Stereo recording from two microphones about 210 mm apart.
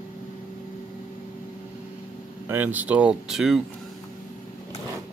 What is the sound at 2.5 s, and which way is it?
Speech, 10° right (ahead or behind).